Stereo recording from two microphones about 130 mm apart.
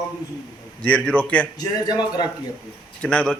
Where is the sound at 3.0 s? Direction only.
10° left (ahead or behind).